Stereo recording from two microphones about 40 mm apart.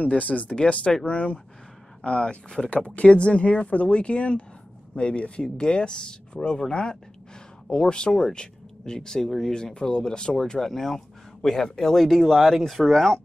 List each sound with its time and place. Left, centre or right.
0.0 s speech: left
8.2 s speech: centre